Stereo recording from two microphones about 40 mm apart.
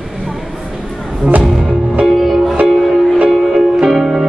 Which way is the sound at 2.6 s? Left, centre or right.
Centre.